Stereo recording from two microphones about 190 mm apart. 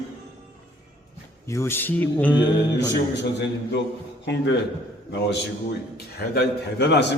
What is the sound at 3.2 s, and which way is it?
A man's voice, 65° left (ahead or behind).